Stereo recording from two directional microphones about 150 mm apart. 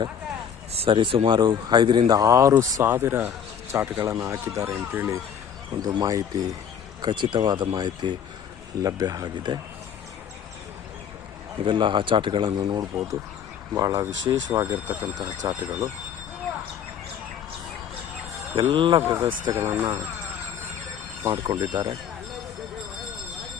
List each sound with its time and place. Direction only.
0.7 s a man's voice: 35° right (ahead or behind)
11.6 s a man's voice: 35° right (ahead or behind)
14.7 s speech: 15° right (ahead or behind)
18.5 s speech: 35° right (ahead or behind)
19.0 s speech: 15° right (ahead or behind)
21.2 s a man's voice: 25° right (ahead or behind)